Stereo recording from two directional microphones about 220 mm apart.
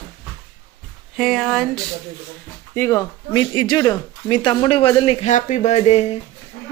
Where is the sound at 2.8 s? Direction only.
15° left (ahead or behind).